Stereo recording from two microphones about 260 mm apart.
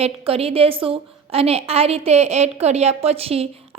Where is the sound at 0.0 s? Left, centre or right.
Right.